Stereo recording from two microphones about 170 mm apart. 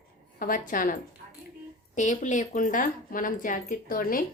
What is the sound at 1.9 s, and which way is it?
Speech, 45° left (ahead or behind).